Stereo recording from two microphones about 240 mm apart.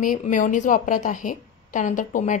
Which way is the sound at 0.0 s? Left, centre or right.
Left.